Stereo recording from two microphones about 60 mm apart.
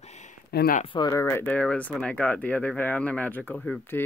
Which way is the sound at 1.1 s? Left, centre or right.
Left.